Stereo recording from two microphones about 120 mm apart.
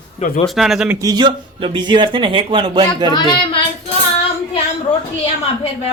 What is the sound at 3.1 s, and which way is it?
Speech, 40° left (ahead or behind).